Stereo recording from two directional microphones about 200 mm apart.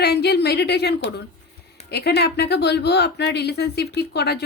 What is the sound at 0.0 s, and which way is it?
A woman's voice, 55° left (ahead or behind).